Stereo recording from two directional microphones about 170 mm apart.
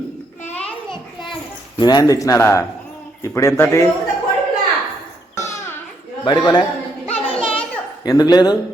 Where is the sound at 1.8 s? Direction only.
25° left (ahead or behind).